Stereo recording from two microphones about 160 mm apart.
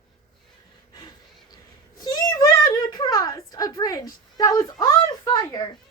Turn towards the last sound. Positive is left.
turn(degrees=25)  # may be behind; listen again after turning